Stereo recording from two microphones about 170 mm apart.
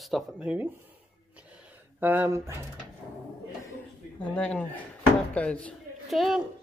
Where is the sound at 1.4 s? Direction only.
10° right (ahead or behind).